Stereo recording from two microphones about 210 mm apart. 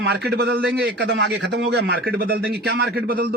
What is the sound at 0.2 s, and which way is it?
Speech, 50° right (ahead or behind).